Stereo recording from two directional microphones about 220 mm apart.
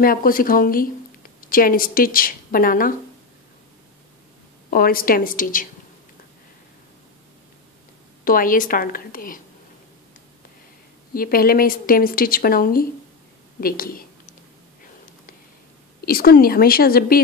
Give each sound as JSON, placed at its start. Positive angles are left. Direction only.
{"t": 0.0, "sound": "speech", "side_deg": 40}
{"t": 4.6, "sound": "speech", "side_deg": 40}
{"t": 8.2, "sound": "speech", "side_deg": 40}
{"t": 11.1, "sound": "speech", "side_deg": 40}
{"t": 16.1, "sound": "speech", "side_deg": 45}